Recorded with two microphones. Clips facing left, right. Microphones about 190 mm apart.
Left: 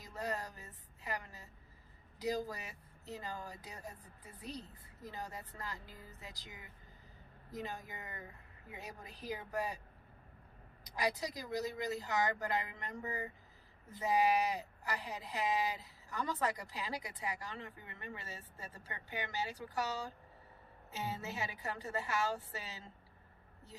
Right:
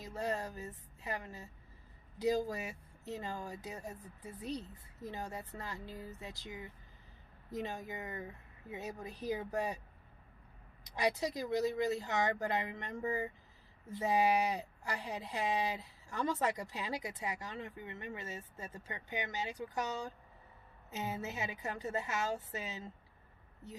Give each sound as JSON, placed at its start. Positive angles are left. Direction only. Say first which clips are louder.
{"t": 0.0, "sound": "speech", "louder": "right 3 dB", "side_deg": -25}
{"t": 5.1, "sound": "speech", "louder": "right 3 dB", "side_deg": -25}
{"t": 10.9, "sound": "speech", "louder": "right 3 dB", "side_deg": -25}
{"t": 20.9, "sound": "speech", "louder": "right 2 dB", "side_deg": -20}